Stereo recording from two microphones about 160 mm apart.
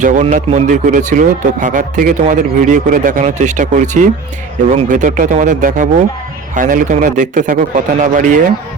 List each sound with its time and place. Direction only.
0.0 s a man's voice: 50° right (ahead or behind)